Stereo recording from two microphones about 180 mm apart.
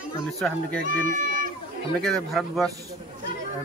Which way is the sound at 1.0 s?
50° right (ahead or behind).